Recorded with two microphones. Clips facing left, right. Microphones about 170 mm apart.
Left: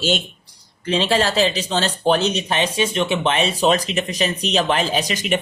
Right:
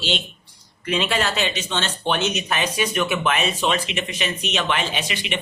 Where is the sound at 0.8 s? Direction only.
30° left (ahead or behind).